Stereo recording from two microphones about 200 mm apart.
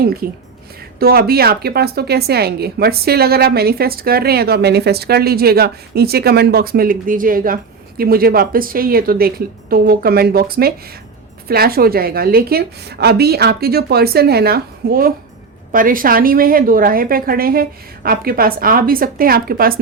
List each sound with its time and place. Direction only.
0.0 s a woman's voice: 50° right (ahead or behind)